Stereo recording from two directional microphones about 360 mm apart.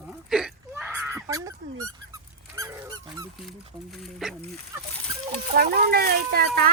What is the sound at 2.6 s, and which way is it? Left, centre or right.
Dog, centre.